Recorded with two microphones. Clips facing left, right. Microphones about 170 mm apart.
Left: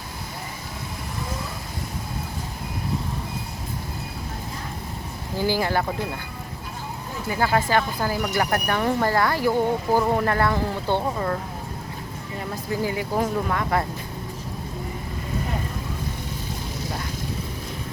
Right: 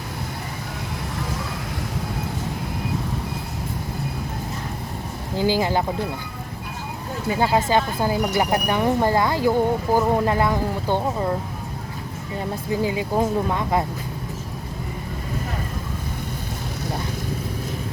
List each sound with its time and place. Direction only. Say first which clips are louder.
5.4 s speech: right 2 dB; 15° right (ahead or behind)
7.3 s speech: right 2 dB; 20° right (ahead or behind)
12.8 s speech: right 2 dB; 20° right (ahead or behind)